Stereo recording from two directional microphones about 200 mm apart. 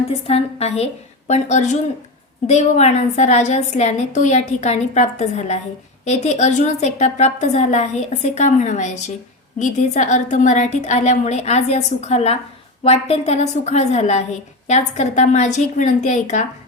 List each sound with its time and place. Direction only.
0.1 s a woman's voice: 30° left (ahead or behind)